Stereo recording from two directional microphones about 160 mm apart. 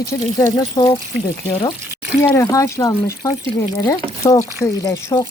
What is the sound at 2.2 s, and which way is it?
Speech, 20° left (ahead or behind).